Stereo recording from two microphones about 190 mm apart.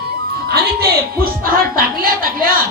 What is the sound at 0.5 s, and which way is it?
A woman's voice, 50° right (ahead or behind).